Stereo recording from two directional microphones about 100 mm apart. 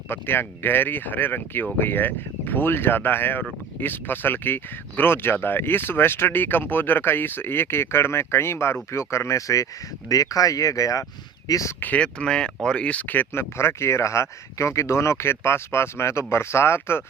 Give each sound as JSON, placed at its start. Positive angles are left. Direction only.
{"t": 0.1, "sound": "speech", "side_deg": 20}
{"t": 11.8, "sound": "speech", "side_deg": 15}